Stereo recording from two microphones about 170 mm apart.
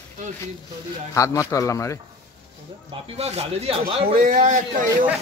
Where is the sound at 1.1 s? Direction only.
20° left (ahead or behind).